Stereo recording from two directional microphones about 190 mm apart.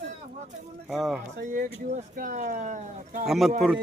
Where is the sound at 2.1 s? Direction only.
45° right (ahead or behind).